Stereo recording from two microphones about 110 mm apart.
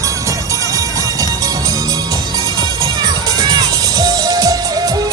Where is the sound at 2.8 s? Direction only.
35° right (ahead or behind).